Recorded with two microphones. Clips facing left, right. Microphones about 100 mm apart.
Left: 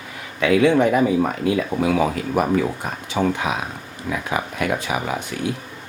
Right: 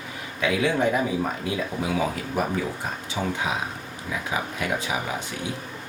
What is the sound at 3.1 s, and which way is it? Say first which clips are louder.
Speech: left 6 dB; 65° left (ahead or behind).